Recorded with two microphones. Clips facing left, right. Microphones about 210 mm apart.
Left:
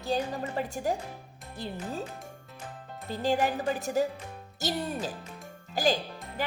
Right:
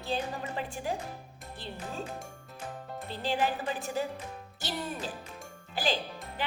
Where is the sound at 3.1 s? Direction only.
45° left (ahead or behind).